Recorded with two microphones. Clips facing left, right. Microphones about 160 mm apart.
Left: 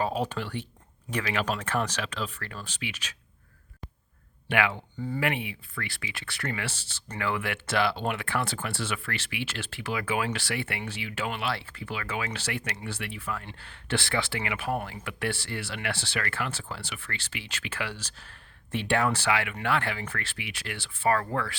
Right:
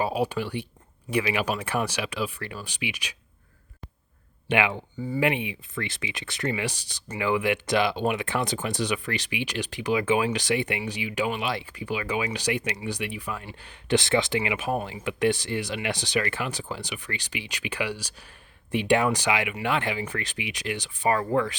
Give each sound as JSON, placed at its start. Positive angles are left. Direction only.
{"t": 0.0, "sound": "speech", "side_deg": -10}
{"t": 4.4, "sound": "speech", "side_deg": -20}